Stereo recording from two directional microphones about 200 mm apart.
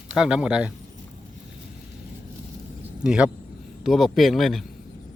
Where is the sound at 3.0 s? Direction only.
5° right (ahead or behind).